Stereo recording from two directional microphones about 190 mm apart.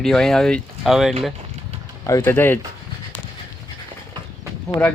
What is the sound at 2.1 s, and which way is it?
Speech, 15° left (ahead or behind).